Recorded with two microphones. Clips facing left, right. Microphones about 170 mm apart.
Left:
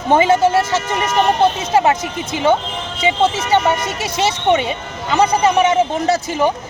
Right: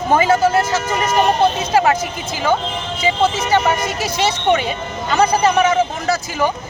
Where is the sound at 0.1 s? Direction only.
25° left (ahead or behind).